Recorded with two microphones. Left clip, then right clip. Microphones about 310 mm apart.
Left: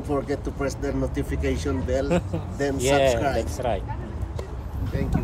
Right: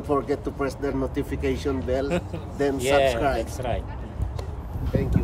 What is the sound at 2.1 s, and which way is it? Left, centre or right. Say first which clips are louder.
Speech: left 3 dB; centre.